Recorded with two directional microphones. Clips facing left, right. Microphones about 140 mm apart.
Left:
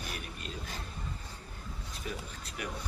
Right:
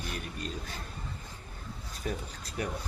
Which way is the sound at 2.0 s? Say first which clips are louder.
Right 5 dB; 40° right (ahead or behind).